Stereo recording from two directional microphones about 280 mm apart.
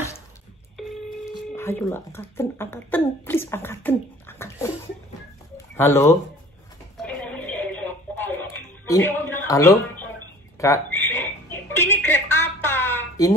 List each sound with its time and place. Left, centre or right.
0.8 s telephone: centre
1.3 s speech: centre
5.8 s speech: centre
7.0 s a sound: centre